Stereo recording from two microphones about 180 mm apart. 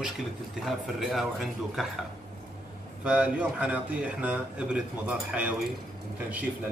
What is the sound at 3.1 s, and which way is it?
Speech, 5° right (ahead or behind).